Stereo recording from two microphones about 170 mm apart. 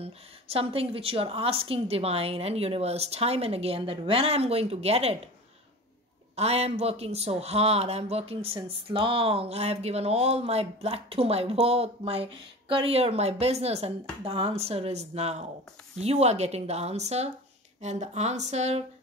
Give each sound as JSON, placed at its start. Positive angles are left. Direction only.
{"t": 0.0, "sound": "a woman's voice", "side_deg": -35}
{"t": 6.3, "sound": "a woman's voice", "side_deg": -40}